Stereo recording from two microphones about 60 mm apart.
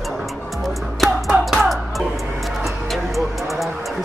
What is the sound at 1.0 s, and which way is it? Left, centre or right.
Music, centre.